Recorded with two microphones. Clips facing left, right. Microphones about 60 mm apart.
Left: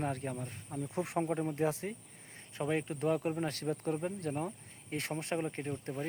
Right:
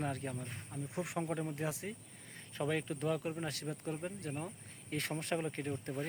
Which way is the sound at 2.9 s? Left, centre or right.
Left.